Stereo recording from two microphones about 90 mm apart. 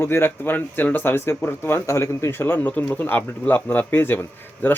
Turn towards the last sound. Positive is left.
turn(degrees=25)  # may be behind; listen again after turning